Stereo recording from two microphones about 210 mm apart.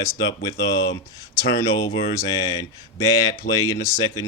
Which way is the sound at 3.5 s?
15° left (ahead or behind).